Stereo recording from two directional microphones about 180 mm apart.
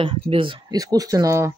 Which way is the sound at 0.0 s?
30° right (ahead or behind).